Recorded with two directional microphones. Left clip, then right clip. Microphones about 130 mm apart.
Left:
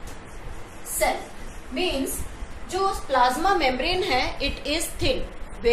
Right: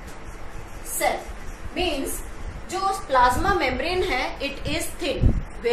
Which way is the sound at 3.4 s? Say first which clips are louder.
Left 1 dB; 10° left (ahead or behind).